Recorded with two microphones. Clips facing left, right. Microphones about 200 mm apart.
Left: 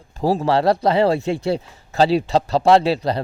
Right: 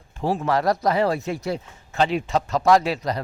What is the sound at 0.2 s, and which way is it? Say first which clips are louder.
Speech: left 4 dB; 35° left (ahead or behind).